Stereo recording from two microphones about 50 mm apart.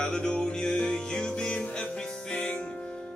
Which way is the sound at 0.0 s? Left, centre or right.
Centre.